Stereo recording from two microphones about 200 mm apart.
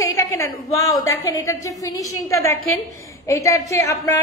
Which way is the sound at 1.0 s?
15° left (ahead or behind).